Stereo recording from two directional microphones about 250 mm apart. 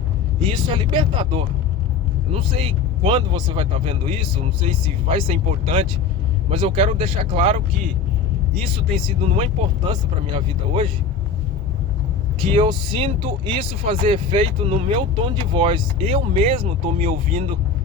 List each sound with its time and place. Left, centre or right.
0.4 s speech: centre
8.6 s speech: right
12.4 s speech: centre